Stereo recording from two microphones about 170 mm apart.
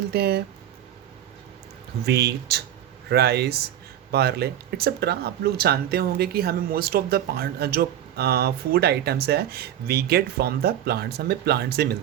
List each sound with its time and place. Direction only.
0.1 s speech: 70° right (ahead or behind)
2.0 s speech: 75° right (ahead or behind)